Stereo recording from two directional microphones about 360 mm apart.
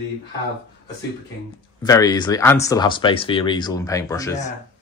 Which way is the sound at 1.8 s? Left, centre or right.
Centre.